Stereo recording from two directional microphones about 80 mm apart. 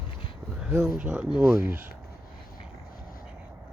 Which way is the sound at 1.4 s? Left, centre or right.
Right.